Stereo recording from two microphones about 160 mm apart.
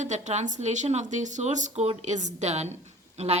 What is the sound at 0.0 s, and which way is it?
A woman's voice, 50° right (ahead or behind).